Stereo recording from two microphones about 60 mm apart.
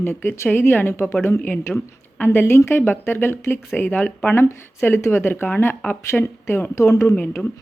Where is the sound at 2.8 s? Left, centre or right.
Left.